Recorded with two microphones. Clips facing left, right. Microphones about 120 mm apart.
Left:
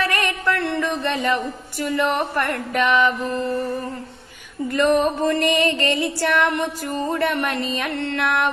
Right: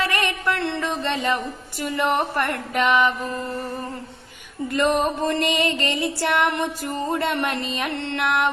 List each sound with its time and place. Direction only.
0.0 s a sound: 25° right (ahead or behind)
1.8 s music: 20° right (ahead or behind)
4.7 s music: 25° right (ahead or behind)